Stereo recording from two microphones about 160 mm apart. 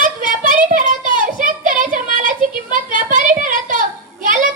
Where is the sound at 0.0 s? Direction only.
60° right (ahead or behind).